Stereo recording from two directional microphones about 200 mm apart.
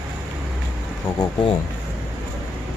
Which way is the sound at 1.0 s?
25° left (ahead or behind).